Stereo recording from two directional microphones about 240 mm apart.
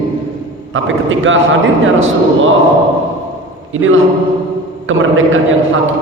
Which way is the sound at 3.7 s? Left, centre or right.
Right.